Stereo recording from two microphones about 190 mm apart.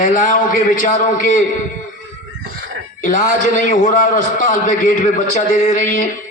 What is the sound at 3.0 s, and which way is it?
A man's voice, 45° left (ahead or behind).